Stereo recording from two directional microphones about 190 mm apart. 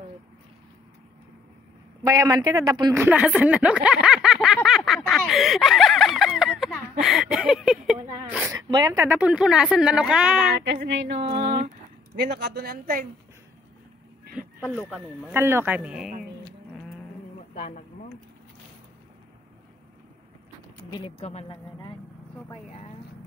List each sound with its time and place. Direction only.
2.0 s speech: 15° right (ahead or behind)
4.6 s quack: centre (ahead or behind)
8.3 s speech: 5° right (ahead or behind)
8.5 s quack: 20° right (ahead or behind); by 10.4 s 5° right (ahead or behind)
10.6 s speech: 65° right (ahead or behind)
11.3 s speech: 50° right (ahead or behind)
12.2 s speech: 60° right (ahead or behind)
14.9 s speech: 10° right (ahead or behind)
17.6 s speech: 40° left (ahead or behind)
20.9 s speech: 30° left (ahead or behind)